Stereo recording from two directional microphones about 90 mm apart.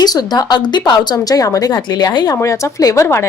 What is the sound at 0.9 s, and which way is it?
Speech, 45° left (ahead or behind).